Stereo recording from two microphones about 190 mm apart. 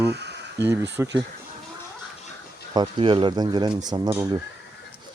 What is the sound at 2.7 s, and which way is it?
Speech, 25° right (ahead or behind).